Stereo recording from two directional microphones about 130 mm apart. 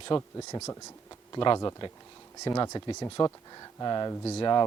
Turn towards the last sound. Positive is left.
turn(degrees=35)  # may be behind; listen again after turning